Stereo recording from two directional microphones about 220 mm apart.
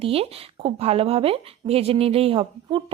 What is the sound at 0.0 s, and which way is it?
A woman's voice, 25° right (ahead or behind).